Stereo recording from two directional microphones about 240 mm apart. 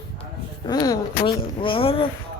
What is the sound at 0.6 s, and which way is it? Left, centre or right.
Speech, centre.